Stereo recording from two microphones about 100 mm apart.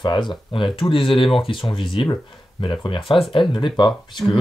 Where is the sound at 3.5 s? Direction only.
50° left (ahead or behind).